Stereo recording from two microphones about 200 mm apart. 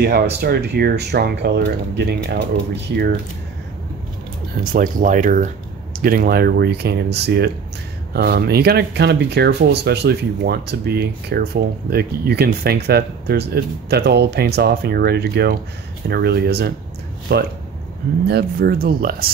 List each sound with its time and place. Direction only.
0.0 s speech: 50° right (ahead or behind)
4.7 s speech: 40° right (ahead or behind)